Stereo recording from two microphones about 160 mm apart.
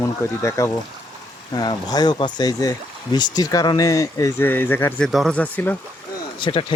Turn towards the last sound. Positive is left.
turn(degrees=30)  # may be behind; listen again after turning